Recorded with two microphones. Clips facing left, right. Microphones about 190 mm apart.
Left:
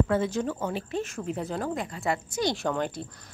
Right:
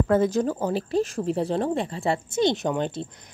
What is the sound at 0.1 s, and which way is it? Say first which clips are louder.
Speech: right 5 dB; 40° right (ahead or behind).